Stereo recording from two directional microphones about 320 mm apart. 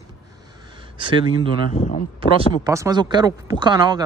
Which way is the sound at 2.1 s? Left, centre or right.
Centre.